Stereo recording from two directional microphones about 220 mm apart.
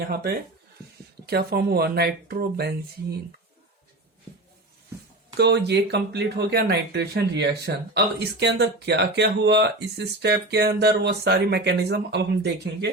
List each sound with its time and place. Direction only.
0.1 s speech: 45° right (ahead or behind)
5.4 s speech: 50° right (ahead or behind)